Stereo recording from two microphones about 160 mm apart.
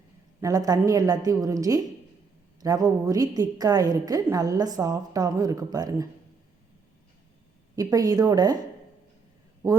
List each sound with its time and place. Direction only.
0.4 s a woman's voice: 20° right (ahead or behind)
7.8 s a woman's voice: 20° right (ahead or behind)